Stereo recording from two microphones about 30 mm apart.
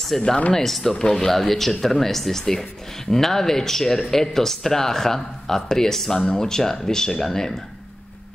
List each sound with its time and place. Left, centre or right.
0.1 s speech: centre